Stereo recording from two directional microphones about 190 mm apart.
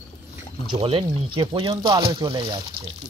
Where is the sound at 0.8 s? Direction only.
30° right (ahead or behind).